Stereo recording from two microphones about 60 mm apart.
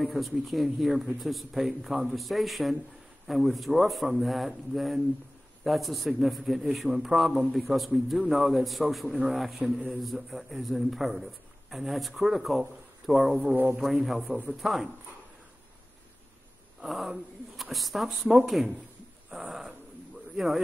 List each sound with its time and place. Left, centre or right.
0.0 s speech: centre
13.3 s speech: centre
13.8 s speech: centre
16.8 s speech: centre
19.3 s a sound: centre
20.3 s speech: centre